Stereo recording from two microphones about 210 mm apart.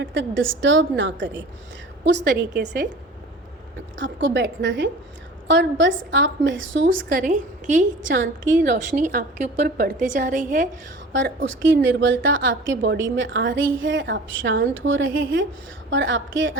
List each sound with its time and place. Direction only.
0.0 s a woman's voice: 60° right (ahead or behind)
3.9 s a woman's voice: 60° right (ahead or behind)
7.1 s a woman's voice: 40° right (ahead or behind)
8.1 s a woman's voice: 60° right (ahead or behind)
8.6 s a woman's voice: 40° right (ahead or behind)
11.1 s a woman's voice: 65° right (ahead or behind)